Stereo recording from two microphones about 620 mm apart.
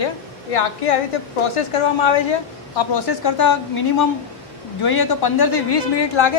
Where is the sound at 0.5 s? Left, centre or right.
Left.